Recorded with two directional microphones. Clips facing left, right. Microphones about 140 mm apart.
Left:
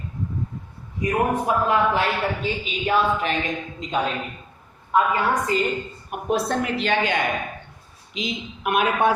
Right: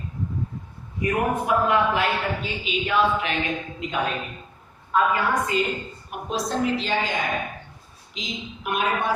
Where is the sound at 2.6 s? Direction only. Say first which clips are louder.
Even; 40° left (ahead or behind).